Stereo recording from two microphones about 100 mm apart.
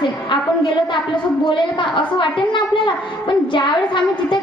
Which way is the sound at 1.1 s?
55° left (ahead or behind).